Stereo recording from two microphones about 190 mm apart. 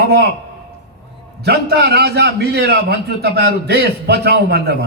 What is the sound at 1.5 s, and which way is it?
A man's voice, 60° right (ahead or behind).